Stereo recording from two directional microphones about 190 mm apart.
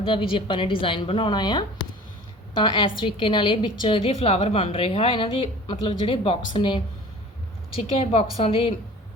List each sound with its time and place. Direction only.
0.0 s a woman's voice: 25° left (ahead or behind)